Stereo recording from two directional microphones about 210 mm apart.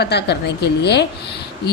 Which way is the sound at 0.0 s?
50° left (ahead or behind).